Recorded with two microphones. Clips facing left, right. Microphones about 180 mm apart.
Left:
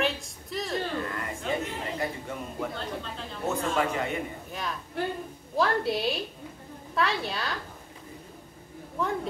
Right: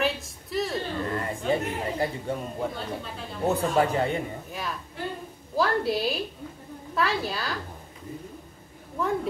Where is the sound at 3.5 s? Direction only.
35° right (ahead or behind).